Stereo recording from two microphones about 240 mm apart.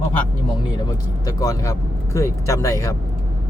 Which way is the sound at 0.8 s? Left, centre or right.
Centre.